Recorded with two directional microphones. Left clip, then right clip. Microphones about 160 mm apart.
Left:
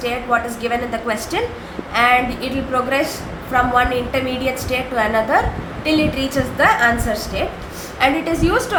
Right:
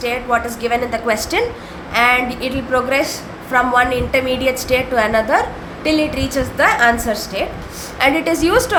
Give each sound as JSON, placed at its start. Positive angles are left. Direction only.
{"t": 0.0, "sound": "a woman's voice", "side_deg": -30}